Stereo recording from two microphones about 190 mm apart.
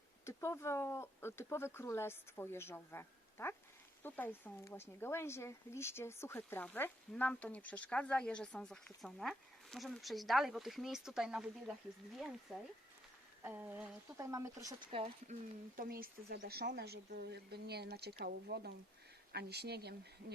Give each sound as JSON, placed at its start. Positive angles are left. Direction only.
{"t": 0.3, "sound": "speech", "side_deg": 15}
{"t": 14.8, "sound": "speech", "side_deg": -30}
{"t": 15.7, "sound": "speech", "side_deg": -50}